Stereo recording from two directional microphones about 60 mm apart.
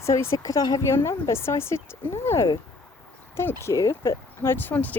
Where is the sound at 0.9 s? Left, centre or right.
Left.